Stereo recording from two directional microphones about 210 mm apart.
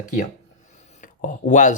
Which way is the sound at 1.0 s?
35° left (ahead or behind).